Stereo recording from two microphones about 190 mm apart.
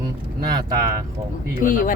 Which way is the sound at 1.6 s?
45° left (ahead or behind).